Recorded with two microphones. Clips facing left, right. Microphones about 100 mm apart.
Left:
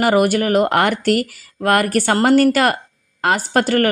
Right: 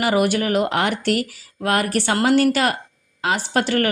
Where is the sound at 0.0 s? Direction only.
45° left (ahead or behind).